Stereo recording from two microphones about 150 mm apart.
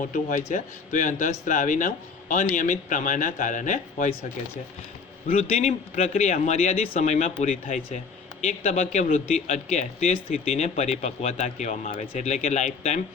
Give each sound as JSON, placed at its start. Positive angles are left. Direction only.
{"t": 0.0, "sound": "speech", "side_deg": 60}
{"t": 5.3, "sound": "speech", "side_deg": 50}